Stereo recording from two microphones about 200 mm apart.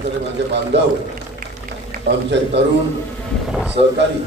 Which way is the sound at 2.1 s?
60° right (ahead or behind).